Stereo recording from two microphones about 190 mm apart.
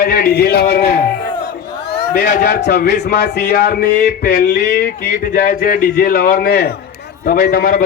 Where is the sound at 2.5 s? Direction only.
55° left (ahead or behind).